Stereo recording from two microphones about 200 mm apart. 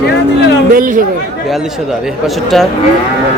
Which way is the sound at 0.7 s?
45° right (ahead or behind).